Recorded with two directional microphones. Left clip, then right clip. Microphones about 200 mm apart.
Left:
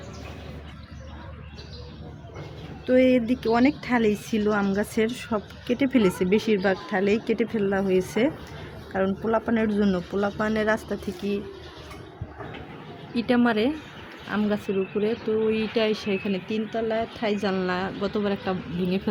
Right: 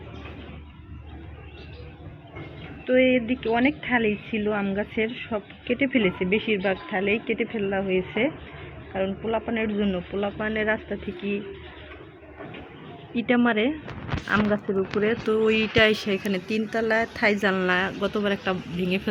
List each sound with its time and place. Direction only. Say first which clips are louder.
2.8 s speech: even; 25° left (ahead or behind)
13.2 s a woman's voice: even; 15° left (ahead or behind)